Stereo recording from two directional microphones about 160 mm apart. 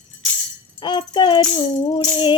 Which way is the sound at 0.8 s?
30° left (ahead or behind).